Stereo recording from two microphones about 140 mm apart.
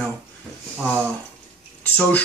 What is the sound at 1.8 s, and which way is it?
Speech, 10° left (ahead or behind).